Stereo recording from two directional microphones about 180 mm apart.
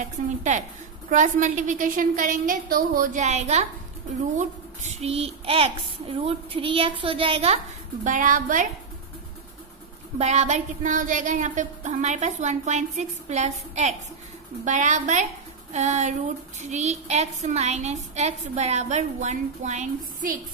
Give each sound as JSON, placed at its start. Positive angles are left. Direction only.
{"t": 0.0, "sound": "a woman's voice", "side_deg": -45}
{"t": 10.1, "sound": "a woman's voice", "side_deg": -35}